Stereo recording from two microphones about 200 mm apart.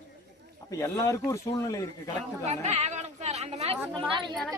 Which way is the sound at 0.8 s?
15° left (ahead or behind).